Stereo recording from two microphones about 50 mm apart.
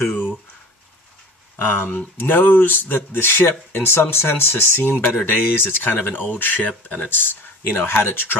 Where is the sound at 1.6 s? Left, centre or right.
Left.